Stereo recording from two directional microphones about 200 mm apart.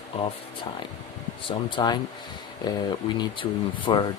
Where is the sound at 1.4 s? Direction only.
20° left (ahead or behind).